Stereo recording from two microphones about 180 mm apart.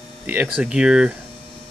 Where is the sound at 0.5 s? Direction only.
5° right (ahead or behind).